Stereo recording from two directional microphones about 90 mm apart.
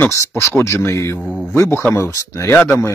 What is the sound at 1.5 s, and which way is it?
Speech, 25° left (ahead or behind).